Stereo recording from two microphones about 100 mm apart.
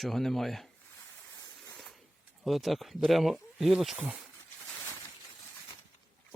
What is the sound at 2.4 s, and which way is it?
Speech, centre (ahead or behind).